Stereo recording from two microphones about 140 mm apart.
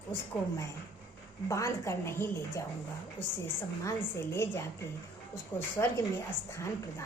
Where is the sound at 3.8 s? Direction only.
15° left (ahead or behind).